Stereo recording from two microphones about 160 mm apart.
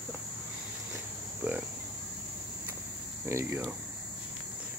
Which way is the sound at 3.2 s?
15° right (ahead or behind).